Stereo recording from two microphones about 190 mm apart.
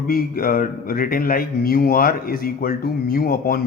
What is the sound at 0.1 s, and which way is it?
Speech, 50° left (ahead or behind).